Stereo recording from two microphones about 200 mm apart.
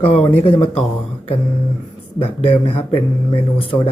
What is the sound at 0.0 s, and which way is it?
Speech, 30° left (ahead or behind).